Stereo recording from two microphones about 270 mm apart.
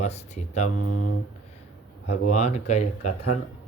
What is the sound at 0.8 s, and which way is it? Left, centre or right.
Speech, left.